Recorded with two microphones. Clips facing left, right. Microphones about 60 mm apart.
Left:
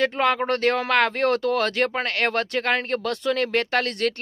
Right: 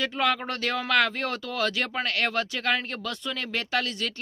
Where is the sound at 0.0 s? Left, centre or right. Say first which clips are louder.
Left 5 dB; left.